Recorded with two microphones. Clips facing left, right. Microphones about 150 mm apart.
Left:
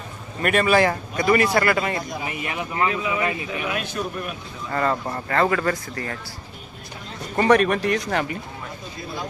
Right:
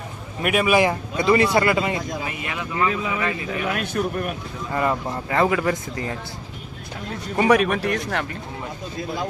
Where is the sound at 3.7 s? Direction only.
50° right (ahead or behind).